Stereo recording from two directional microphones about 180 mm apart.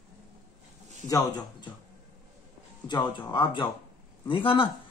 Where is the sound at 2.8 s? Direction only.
25° left (ahead or behind).